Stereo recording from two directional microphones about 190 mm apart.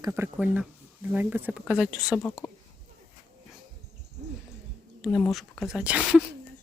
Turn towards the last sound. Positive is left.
turn(degrees=-5)  # may be behind; listen again after turning